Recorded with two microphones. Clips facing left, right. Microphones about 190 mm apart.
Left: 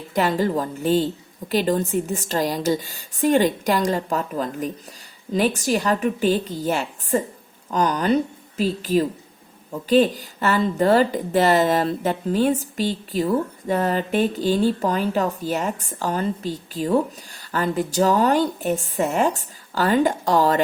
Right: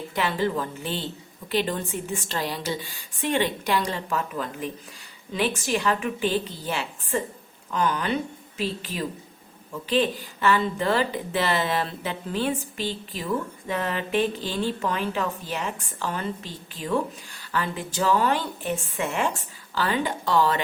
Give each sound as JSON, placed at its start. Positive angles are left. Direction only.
{"t": 0.1, "sound": "a woman's voice", "side_deg": 40}